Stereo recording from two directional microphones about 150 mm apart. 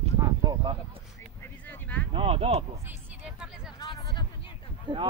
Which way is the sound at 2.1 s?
40° right (ahead or behind).